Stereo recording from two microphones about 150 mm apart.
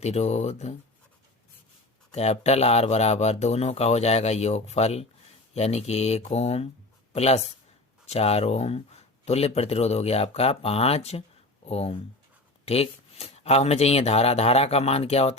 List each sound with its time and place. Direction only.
0.0 s speech: 45° left (ahead or behind)
2.1 s speech: 45° left (ahead or behind)